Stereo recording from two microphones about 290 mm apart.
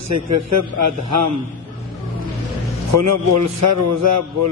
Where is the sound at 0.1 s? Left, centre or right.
Right.